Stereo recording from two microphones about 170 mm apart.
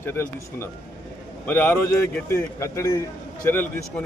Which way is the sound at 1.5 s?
10° left (ahead or behind).